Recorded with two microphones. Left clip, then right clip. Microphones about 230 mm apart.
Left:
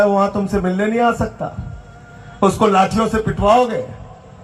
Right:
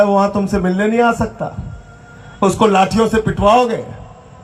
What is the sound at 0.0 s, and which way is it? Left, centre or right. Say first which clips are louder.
A man's voice: right 2 dB; right.